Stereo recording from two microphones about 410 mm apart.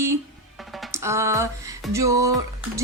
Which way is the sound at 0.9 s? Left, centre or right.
Centre.